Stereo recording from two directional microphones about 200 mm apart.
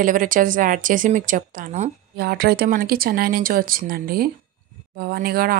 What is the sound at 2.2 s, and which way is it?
A woman's voice, 50° right (ahead or behind).